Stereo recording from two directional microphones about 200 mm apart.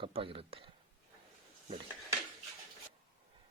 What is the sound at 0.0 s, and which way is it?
Speech, 25° right (ahead or behind).